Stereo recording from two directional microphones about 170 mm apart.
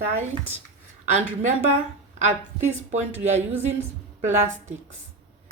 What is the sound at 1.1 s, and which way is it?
Speech, 45° right (ahead or behind).